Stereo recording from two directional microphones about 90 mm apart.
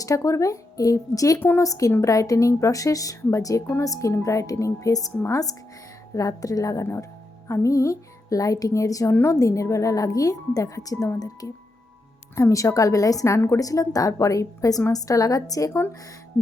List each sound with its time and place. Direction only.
0.0 s a woman's voice: 35° left (ahead or behind)
1.4 s a woman's voice: 25° left (ahead or behind)
1.6 s a woman's voice: 40° left (ahead or behind)